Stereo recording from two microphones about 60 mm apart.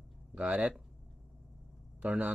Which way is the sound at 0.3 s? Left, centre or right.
Right.